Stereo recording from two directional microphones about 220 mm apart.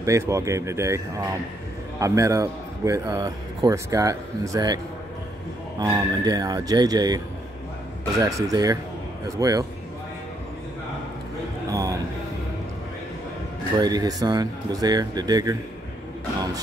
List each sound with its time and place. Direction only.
0.0 s a man's voice: 15° right (ahead or behind)
5.8 s a man's voice: 20° right (ahead or behind)
8.2 s a man's voice: 15° right (ahead or behind)
13.7 s a man's voice: 20° right (ahead or behind)